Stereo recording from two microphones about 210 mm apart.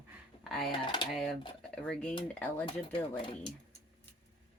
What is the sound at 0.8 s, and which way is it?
Speech, 25° left (ahead or behind).